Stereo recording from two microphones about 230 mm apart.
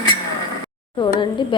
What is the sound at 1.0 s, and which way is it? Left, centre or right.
Speech, centre.